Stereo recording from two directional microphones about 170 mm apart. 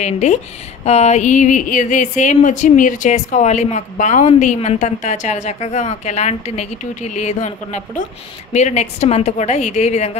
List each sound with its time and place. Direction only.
0.0 s a woman's voice: 40° left (ahead or behind)